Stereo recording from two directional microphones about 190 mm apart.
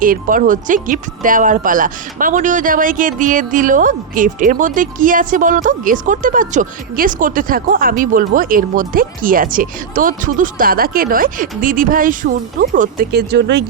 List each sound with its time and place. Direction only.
0.0 s speech: 45° right (ahead or behind)